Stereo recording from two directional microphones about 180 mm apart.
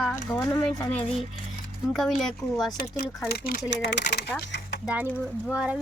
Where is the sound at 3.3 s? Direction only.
55° left (ahead or behind).